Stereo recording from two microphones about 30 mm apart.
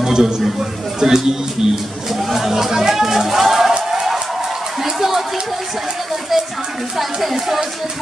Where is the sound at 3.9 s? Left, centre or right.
Centre.